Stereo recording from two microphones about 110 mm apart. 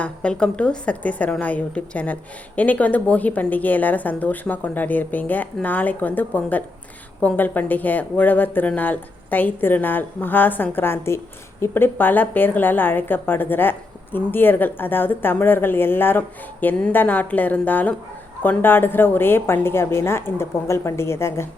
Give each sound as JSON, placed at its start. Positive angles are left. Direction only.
{"t": 0.0, "sound": "a woman's voice", "side_deg": 10}